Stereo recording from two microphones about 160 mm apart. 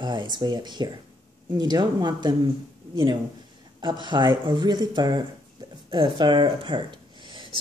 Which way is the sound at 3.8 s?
30° right (ahead or behind).